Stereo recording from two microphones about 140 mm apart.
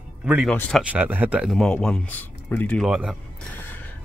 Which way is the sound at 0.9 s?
10° right (ahead or behind).